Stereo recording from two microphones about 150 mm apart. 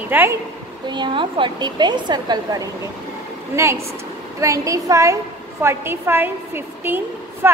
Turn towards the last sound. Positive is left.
turn(degrees=-15)  # may be behind; listen again after turning